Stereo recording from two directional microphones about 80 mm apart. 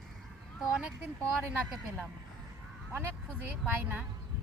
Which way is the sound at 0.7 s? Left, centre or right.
Centre.